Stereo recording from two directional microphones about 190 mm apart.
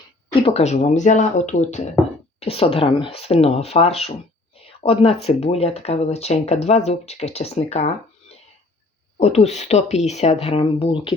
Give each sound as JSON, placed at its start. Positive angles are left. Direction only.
{"t": 0.3, "sound": "speech", "side_deg": 30}
{"t": 4.5, "sound": "a sound", "side_deg": 30}
{"t": 5.0, "sound": "speech", "side_deg": 30}
{"t": 9.1, "sound": "speech", "side_deg": 35}